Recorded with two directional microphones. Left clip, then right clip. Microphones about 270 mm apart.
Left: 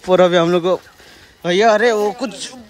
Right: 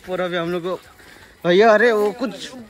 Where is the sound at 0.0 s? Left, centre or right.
Left.